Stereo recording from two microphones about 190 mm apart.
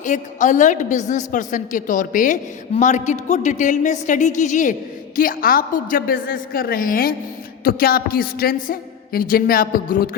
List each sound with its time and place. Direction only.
0.0 s a woman's voice: 40° left (ahead or behind)